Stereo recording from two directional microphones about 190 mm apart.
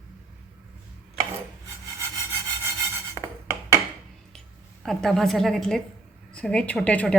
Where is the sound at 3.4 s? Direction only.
15° right (ahead or behind).